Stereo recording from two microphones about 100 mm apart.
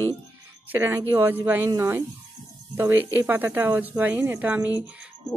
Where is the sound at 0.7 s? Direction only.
25° right (ahead or behind).